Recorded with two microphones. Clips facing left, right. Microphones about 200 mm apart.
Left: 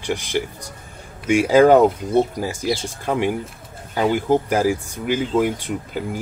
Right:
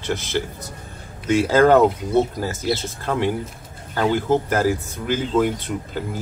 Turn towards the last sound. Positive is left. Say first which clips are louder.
# left 1 dB
turn(degrees=15)  # may be behind; listen again after turning